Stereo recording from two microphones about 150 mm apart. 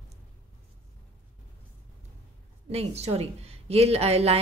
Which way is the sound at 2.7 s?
45° right (ahead or behind).